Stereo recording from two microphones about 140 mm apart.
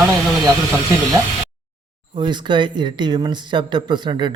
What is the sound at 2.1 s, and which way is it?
Speech, 35° right (ahead or behind).